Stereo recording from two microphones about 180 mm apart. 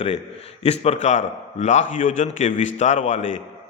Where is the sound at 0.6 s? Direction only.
35° left (ahead or behind).